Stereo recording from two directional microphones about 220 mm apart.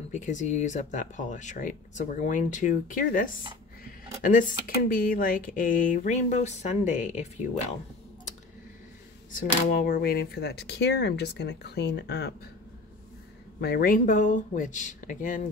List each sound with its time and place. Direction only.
0.1 s speech: 35° left (ahead or behind)
9.3 s speech: 40° left (ahead or behind)
13.6 s speech: 45° left (ahead or behind)